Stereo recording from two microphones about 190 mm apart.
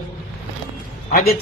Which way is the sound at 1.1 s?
50° left (ahead or behind).